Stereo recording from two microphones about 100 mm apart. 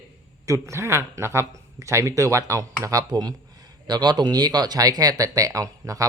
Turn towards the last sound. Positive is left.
turn(degrees=-35)  # may be behind; listen again after turning